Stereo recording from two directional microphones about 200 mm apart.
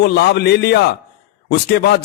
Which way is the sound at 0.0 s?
55° left (ahead or behind).